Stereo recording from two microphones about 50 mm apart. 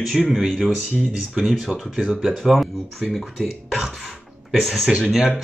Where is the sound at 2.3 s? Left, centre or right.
Centre.